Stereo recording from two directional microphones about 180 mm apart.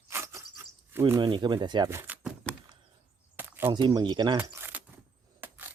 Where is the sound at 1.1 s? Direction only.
25° right (ahead or behind).